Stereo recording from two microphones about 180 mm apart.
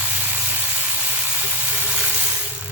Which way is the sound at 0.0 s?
10° right (ahead or behind).